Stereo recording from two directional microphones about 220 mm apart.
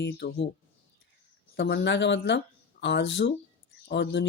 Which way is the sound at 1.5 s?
50° left (ahead or behind).